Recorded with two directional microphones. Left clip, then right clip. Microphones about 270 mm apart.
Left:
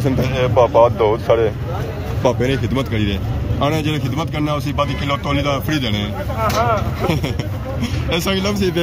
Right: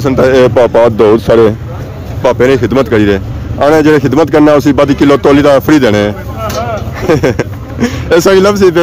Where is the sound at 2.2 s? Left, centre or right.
Centre.